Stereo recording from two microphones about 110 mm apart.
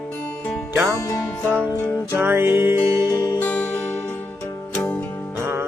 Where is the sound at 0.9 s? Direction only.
30° left (ahead or behind).